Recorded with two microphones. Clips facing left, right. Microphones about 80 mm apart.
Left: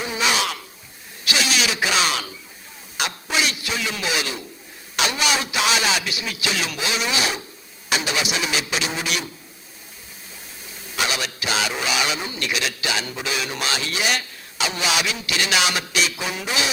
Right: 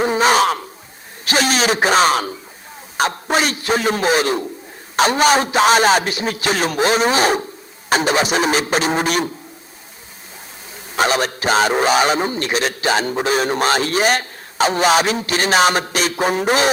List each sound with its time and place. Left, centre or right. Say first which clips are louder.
0.0 s a sound: right 9 dB; right
4.9 s a man's voice: right 9 dB; right
10.9 s a man's voice: right 8 dB; right